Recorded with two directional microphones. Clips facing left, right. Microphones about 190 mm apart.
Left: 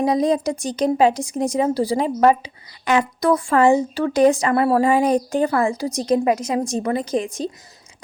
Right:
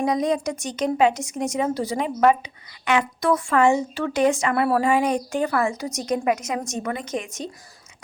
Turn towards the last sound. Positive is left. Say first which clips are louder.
# left 7 dB
turn(degrees=35)  # may be behind; listen again after turning